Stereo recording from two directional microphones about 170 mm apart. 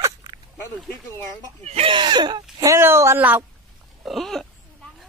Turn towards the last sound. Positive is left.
turn(degrees=0)  # may be behind; listen again after turning